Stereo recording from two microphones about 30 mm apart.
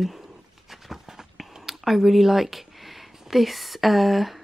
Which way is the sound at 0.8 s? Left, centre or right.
Centre.